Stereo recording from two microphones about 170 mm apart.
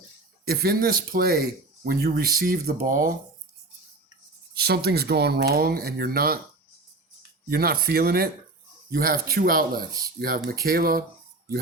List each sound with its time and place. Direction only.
0.4 s speech: 65° right (ahead or behind)
4.5 s speech: 70° right (ahead or behind)
7.5 s speech: 65° right (ahead or behind)